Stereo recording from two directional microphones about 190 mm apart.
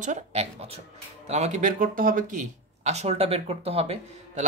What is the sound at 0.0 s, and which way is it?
Speech, 35° right (ahead or behind).